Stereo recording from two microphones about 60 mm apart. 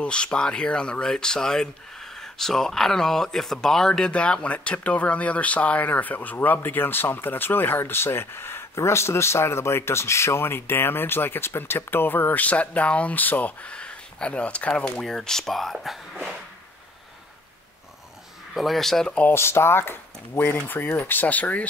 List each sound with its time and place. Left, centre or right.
0.0 s speech: centre
15.0 s speech: centre
18.5 s speech: centre
19.3 s speech: left